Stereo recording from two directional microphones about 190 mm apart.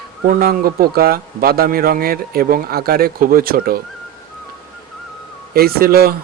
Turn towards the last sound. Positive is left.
turn(degrees=-55)  # may be behind; listen again after turning